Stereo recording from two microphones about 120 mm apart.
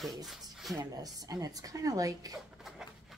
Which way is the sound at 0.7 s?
30° right (ahead or behind).